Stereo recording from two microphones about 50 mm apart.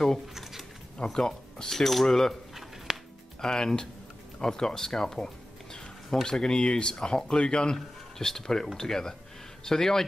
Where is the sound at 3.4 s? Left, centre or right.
Centre.